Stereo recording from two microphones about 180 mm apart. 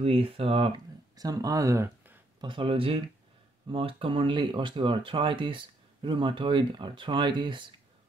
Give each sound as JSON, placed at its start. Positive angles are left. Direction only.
{"t": 0.0, "sound": "speech", "side_deg": -30}
{"t": 2.4, "sound": "speech", "side_deg": -30}